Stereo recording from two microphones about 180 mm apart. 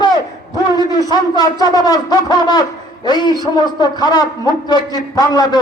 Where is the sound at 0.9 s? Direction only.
20° left (ahead or behind).